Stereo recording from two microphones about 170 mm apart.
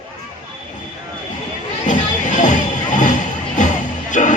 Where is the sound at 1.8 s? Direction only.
45° left (ahead or behind).